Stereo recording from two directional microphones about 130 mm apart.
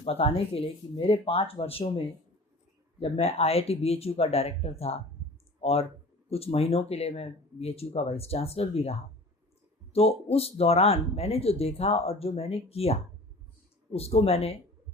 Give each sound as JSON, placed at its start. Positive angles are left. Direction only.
{"t": 0.0, "sound": "speech", "side_deg": 45}
{"t": 3.0, "sound": "speech", "side_deg": 50}